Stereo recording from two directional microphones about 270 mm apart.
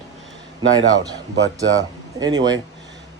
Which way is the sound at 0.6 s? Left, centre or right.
Centre.